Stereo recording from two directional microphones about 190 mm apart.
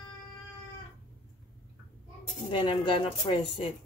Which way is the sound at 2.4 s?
30° left (ahead or behind).